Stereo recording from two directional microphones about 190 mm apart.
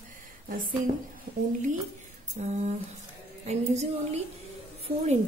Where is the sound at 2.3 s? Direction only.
35° right (ahead or behind).